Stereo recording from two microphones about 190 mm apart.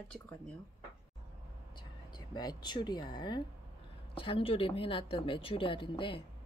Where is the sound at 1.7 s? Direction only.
20° left (ahead or behind).